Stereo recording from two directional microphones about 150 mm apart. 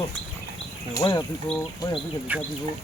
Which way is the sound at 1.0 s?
25° left (ahead or behind).